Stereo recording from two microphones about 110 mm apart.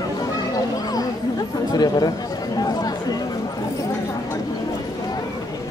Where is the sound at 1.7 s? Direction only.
40° left (ahead or behind).